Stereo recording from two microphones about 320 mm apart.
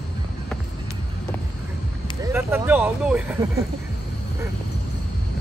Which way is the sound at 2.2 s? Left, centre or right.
Centre.